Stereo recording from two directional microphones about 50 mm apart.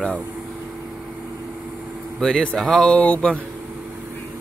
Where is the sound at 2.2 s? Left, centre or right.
Centre.